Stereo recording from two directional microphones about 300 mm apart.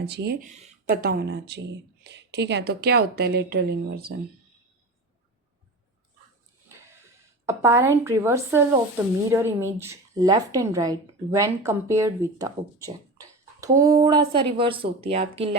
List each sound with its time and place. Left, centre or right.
0.1 s speech: right
7.4 s a woman's voice: centre